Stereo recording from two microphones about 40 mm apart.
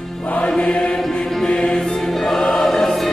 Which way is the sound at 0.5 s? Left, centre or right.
Left.